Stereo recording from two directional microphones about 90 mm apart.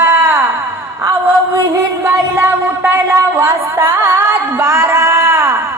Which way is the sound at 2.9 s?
25° right (ahead or behind).